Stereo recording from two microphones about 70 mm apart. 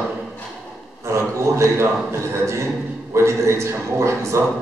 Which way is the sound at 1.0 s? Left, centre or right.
Right.